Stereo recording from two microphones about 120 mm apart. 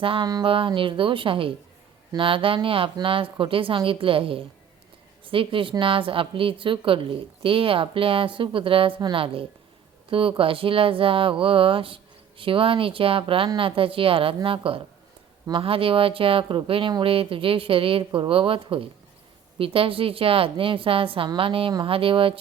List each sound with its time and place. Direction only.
0.0 s a woman's voice: 50° right (ahead or behind)